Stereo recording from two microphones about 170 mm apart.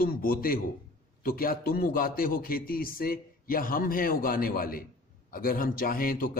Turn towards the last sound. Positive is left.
turn(degrees=55)  # may be behind; listen again after turning